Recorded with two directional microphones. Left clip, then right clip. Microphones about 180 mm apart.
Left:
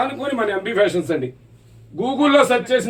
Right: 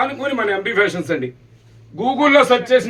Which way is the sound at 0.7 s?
20° right (ahead or behind).